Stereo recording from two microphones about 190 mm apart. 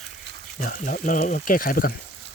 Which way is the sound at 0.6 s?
45° left (ahead or behind).